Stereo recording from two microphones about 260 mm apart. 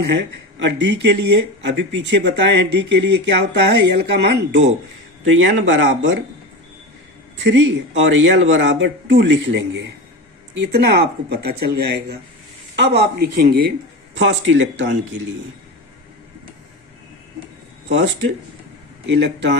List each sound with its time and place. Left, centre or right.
0.6 s speech: right
7.3 s speech: right
14.2 s speech: right
17.8 s speech: right